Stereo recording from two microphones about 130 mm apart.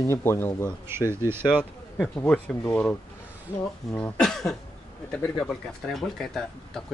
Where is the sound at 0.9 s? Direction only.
20° right (ahead or behind).